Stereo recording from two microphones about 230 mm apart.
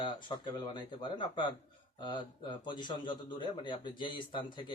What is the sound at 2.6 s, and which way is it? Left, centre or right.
A man's voice, centre.